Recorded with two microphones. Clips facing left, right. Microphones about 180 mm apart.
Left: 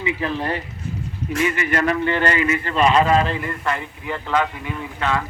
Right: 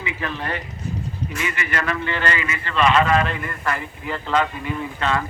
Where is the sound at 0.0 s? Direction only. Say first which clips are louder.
Left 5 dB; 30° left (ahead or behind).